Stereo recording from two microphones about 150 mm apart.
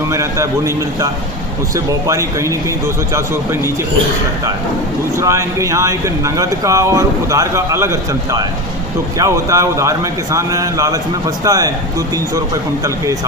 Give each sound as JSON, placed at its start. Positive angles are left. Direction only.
{"t": 0.1, "sound": "speech", "side_deg": -20}
{"t": 5.1, "sound": "speech", "side_deg": -20}